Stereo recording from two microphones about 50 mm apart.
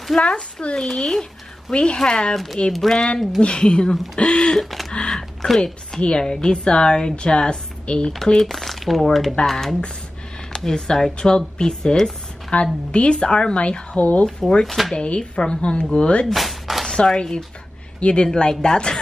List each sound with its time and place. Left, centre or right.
0.2 s a woman's voice: left
2.3 s a woman's voice: centre
3.9 s speech: centre
4.4 s a sound: centre
4.9 s typing: centre
5.9 s a woman's voice: centre
8.3 s speech: centre; by 14.2 s left
14.7 s speech: centre
15.0 s speech: centre
16.3 s a sound: centre
16.8 s a woman's voice: centre